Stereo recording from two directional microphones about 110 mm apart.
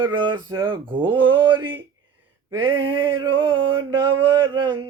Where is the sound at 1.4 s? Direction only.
20° right (ahead or behind).